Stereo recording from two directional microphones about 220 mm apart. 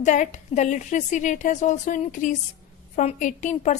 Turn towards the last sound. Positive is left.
turn(degrees=30)  # may be behind; listen again after turning